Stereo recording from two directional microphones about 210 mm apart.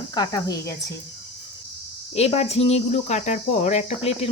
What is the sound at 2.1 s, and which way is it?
Speech, 30° left (ahead or behind).